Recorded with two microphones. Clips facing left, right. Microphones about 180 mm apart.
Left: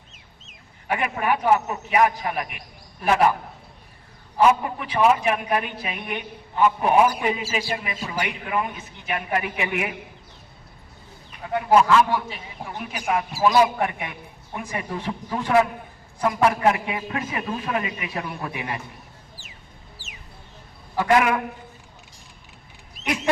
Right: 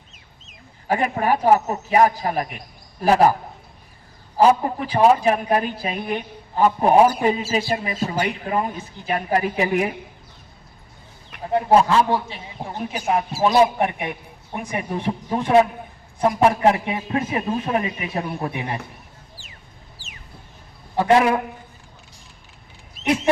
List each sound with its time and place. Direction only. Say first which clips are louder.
0.9 s a woman's voice: right 4 dB; 35° right (ahead or behind)
4.4 s a woman's voice: right 3 dB; 35° right (ahead or behind)
11.4 s a man's voice: right 2 dB; 35° right (ahead or behind)
20.9 s a man's voice: right 3 dB; 30° right (ahead or behind)
23.0 s duck: right 5 dB; 30° right (ahead or behind)